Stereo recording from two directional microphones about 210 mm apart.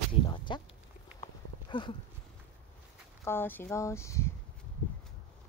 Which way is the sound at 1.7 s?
25° left (ahead or behind).